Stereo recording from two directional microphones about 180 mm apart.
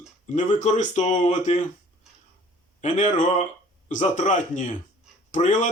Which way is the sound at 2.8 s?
45° left (ahead or behind).